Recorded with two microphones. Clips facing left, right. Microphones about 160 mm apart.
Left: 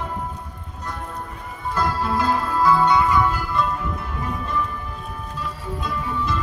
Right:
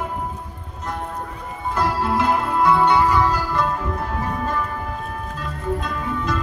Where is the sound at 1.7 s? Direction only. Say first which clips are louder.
Right 2 dB; 25° right (ahead or behind).